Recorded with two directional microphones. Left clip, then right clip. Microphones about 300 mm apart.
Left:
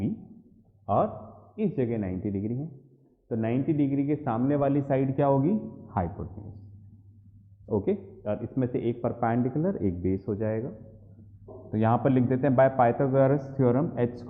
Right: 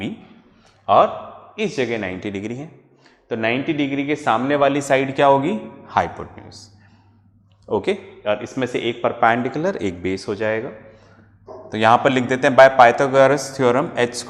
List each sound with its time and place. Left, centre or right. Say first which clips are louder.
0.9 s a man's voice: right 12 dB; centre
7.8 s a man's voice: right 6 dB; centre
11.4 s a sound: right 9 dB; right
11.7 s a man's voice: right 11 dB; centre